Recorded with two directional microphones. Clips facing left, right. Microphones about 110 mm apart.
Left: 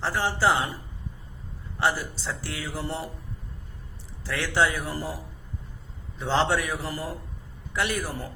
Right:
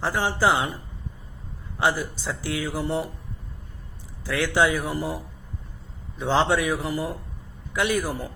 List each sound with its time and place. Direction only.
0.0 s speech: 20° right (ahead or behind)
1.8 s speech: 20° right (ahead or behind)
4.4 s speech: 15° right (ahead or behind)
6.4 s speech: 15° right (ahead or behind)